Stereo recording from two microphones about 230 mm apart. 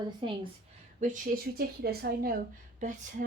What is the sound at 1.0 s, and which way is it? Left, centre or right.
A woman's voice, right.